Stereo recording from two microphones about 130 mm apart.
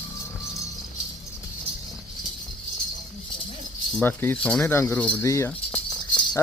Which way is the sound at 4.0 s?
15° left (ahead or behind).